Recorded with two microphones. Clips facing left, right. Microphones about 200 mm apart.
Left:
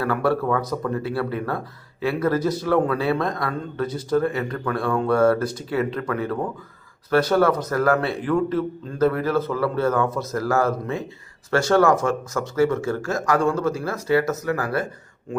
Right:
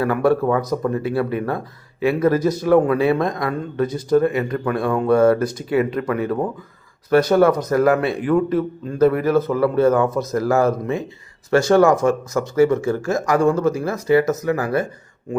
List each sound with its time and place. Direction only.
0.0 s speech: 15° right (ahead or behind)